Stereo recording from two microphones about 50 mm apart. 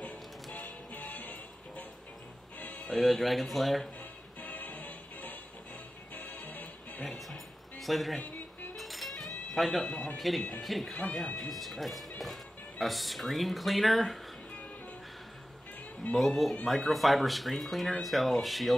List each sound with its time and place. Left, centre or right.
0.9 s music: left
2.9 s speech: centre
4.4 s music: left
7.1 s a man's voice: centre
8.7 s music: centre
10.6 s speech: centre
16.1 s speech: centre